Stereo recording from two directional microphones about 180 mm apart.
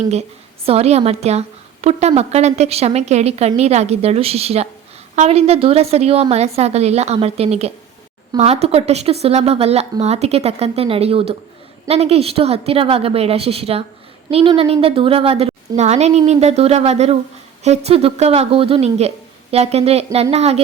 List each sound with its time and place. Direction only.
0.1 s a woman's voice: 35° right (ahead or behind)